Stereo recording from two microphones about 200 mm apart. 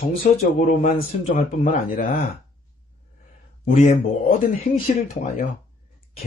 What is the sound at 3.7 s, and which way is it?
Speech, 40° left (ahead or behind).